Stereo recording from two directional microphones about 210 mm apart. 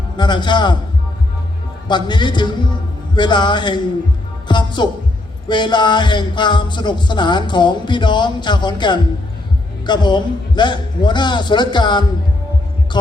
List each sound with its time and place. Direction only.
0.2 s music: 20° left (ahead or behind)
1.9 s music: 20° left (ahead or behind)